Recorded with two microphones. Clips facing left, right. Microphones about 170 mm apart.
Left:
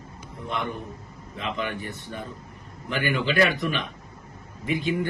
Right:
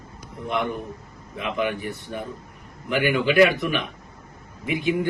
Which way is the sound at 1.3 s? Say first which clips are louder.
Right 4 dB; 15° right (ahead or behind).